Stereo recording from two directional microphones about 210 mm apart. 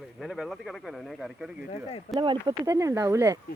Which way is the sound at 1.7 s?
25° left (ahead or behind).